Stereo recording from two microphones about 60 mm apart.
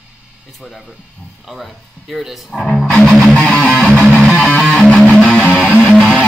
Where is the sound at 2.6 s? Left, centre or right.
Centre.